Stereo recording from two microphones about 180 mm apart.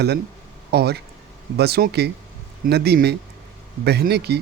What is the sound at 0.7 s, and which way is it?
Speech, 60° right (ahead or behind).